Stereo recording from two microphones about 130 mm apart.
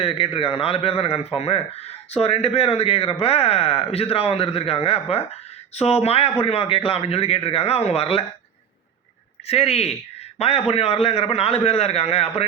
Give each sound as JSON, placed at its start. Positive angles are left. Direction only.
{"t": 0.0, "sound": "speech", "side_deg": 45}
{"t": 9.5, "sound": "speech", "side_deg": 55}